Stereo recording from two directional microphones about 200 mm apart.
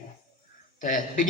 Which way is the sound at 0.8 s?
40° left (ahead or behind).